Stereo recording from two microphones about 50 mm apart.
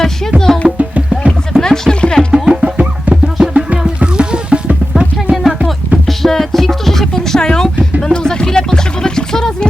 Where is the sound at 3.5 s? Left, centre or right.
Right.